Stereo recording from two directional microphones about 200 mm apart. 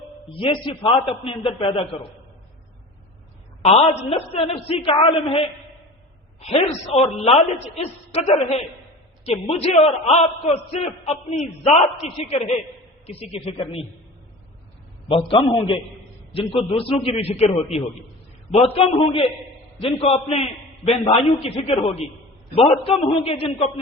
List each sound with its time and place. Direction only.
0.3 s a man's voice: 25° left (ahead or behind)
3.6 s a man's voice: 30° left (ahead or behind)
15.1 s a man's voice: 25° left (ahead or behind)